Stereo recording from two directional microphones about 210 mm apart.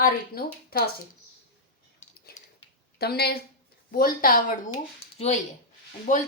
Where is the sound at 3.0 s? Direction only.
50° left (ahead or behind).